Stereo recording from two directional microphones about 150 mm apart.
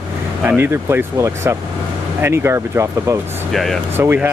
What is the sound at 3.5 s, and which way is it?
Speech, centre (ahead or behind).